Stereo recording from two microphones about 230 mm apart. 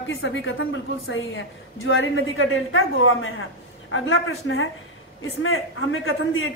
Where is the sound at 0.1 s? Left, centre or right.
Left.